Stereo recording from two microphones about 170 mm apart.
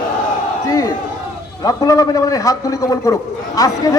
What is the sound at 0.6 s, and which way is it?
A man's voice, 20° left (ahead or behind).